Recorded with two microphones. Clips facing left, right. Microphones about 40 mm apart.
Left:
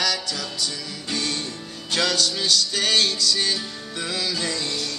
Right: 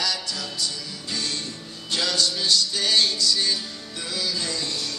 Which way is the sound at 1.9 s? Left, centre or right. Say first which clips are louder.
Left 2 dB; left.